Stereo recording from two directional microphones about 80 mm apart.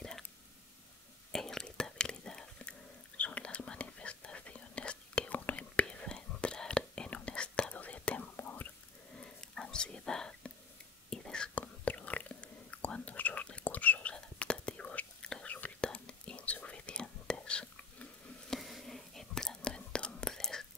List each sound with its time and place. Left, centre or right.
1.3 s whispering: centre; by 8.7 s left
9.1 s whispering: centre